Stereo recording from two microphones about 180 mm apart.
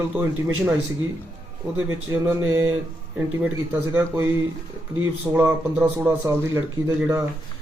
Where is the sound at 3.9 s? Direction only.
10° right (ahead or behind).